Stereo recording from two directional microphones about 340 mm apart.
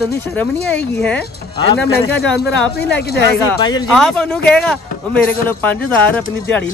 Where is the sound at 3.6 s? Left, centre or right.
Centre.